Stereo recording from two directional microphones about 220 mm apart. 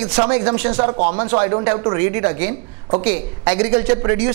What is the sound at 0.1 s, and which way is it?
A man's voice, 20° right (ahead or behind).